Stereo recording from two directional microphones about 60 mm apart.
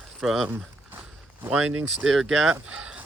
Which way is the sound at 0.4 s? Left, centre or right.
Right.